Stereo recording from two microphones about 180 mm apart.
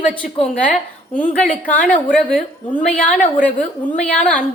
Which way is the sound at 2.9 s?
45° left (ahead or behind).